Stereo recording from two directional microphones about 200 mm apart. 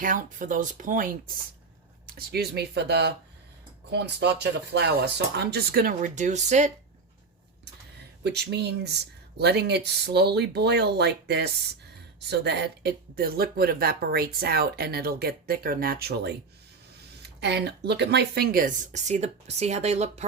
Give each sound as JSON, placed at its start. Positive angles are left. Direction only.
{"t": 0.0, "sound": "speech", "side_deg": -40}
{"t": 2.1, "sound": "speech", "side_deg": -55}
{"t": 8.2, "sound": "speech", "side_deg": -55}